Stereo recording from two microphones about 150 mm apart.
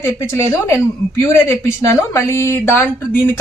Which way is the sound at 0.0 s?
15° left (ahead or behind).